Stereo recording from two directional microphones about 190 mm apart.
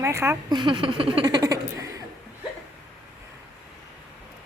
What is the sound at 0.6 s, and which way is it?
Speech, 25° right (ahead or behind).